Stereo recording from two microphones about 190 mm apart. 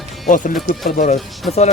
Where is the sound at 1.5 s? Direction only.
35° left (ahead or behind).